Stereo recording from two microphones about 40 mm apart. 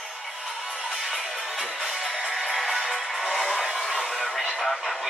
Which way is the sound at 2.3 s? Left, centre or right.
Centre.